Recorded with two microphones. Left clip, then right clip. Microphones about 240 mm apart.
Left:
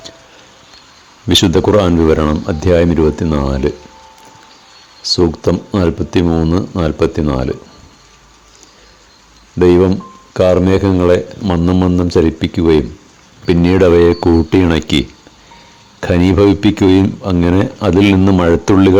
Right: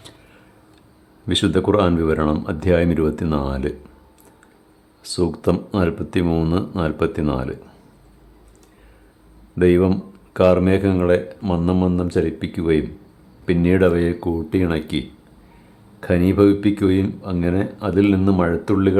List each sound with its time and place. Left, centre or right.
1.3 s speech: left
5.1 s speech: centre
9.6 s speech: left